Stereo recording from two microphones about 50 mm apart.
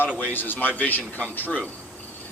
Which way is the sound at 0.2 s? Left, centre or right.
Left.